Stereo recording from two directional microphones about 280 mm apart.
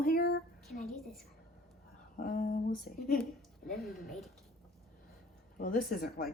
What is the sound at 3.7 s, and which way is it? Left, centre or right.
Speech, centre.